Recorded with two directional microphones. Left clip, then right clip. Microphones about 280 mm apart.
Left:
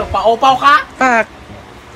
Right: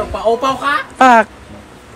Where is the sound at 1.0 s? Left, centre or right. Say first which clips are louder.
Right 4 dB; centre.